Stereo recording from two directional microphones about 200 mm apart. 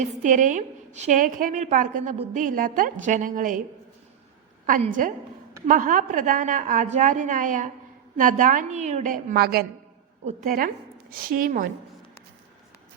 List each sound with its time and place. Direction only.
0.0 s a woman's voice: 40° right (ahead or behind)
2.1 s a sound: 30° right (ahead or behind)
2.4 s a woman's voice: 45° right (ahead or behind)
4.6 s a woman's voice: 40° right (ahead or behind)